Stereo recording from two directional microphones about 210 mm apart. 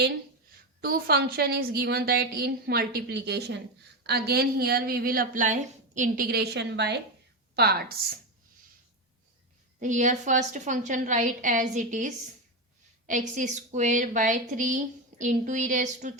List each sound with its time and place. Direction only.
0.8 s a woman's voice: 45° right (ahead or behind)
9.8 s a woman's voice: 35° right (ahead or behind)